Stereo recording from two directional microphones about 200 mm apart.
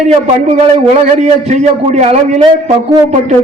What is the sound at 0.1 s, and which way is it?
A man's voice, 30° right (ahead or behind).